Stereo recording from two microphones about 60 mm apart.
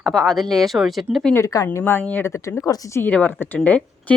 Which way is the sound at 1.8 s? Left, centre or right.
Left.